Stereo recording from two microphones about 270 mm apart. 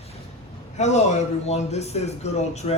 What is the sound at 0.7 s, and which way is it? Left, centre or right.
Speech, left.